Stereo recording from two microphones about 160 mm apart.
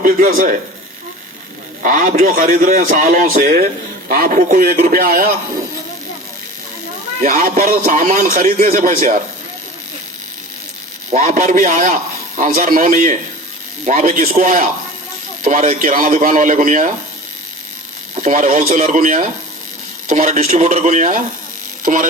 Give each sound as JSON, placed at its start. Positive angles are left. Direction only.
{"t": 0.0, "sound": "a man's voice", "side_deg": -60}
{"t": 1.8, "sound": "a man's voice", "side_deg": -55}
{"t": 7.2, "sound": "a man's voice", "side_deg": -60}
{"t": 11.1, "sound": "a man's voice", "side_deg": -55}
{"t": 18.1, "sound": "a man's voice", "side_deg": -50}